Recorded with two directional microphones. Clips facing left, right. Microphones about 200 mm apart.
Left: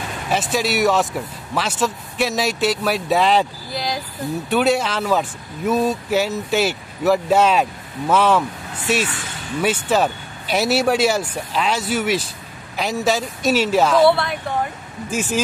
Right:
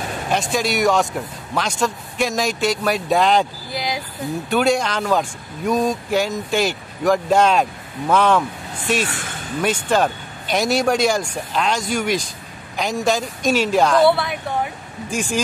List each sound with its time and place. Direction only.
0.3 s speech: 5° left (ahead or behind)
9.0 s speech: 45° right (ahead or behind)
9.6 s speech: 5° left (ahead or behind)